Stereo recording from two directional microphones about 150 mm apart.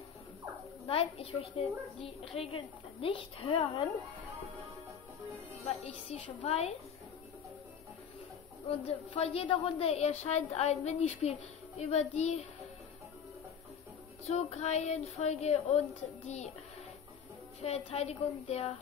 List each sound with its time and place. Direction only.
0.8 s a woman's voice: 40° left (ahead or behind)
5.9 s a woman's voice: 40° left (ahead or behind)
8.6 s a woman's voice: 40° left (ahead or behind)
14.3 s a woman's voice: 45° left (ahead or behind)
17.6 s a woman's voice: 45° left (ahead or behind)